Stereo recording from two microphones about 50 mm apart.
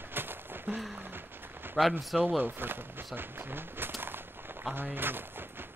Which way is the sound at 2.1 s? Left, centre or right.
Right.